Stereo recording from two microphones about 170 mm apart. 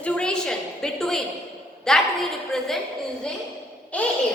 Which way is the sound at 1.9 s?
Centre (ahead or behind).